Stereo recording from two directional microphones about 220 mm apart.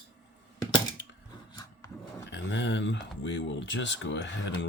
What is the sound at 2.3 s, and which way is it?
Speech, 55° left (ahead or behind).